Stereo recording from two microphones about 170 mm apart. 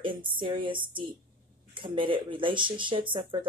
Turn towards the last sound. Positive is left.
turn(degrees=-30)  # may be behind; listen again after turning